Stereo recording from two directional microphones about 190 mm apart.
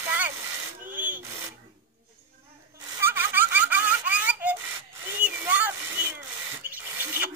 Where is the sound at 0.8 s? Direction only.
45° right (ahead or behind).